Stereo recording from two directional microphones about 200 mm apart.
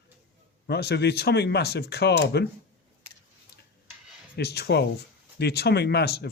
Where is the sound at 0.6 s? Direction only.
55° left (ahead or behind).